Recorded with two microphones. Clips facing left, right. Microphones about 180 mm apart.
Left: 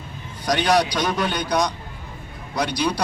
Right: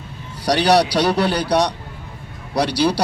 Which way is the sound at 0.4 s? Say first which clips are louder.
Right 4 dB; 35° right (ahead or behind).